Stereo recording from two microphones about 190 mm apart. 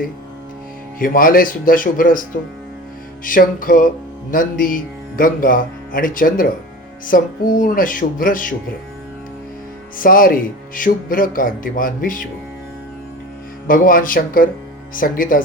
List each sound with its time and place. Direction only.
0.9 s speech: 45° left (ahead or behind)
3.2 s speech: 45° left (ahead or behind)
10.0 s speech: 45° left (ahead or behind)
13.7 s speech: 45° left (ahead or behind)